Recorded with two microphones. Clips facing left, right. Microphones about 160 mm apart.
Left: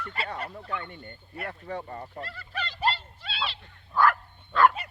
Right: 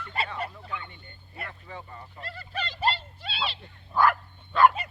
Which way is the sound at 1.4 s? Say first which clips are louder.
Left 9 dB; 50° left (ahead or behind).